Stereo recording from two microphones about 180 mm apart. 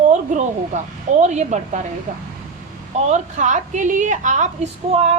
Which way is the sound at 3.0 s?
40° right (ahead or behind).